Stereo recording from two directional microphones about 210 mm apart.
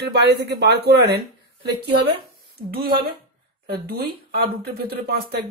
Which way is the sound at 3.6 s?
50° right (ahead or behind).